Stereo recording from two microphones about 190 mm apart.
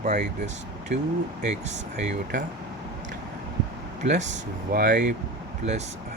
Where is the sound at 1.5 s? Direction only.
40° right (ahead or behind).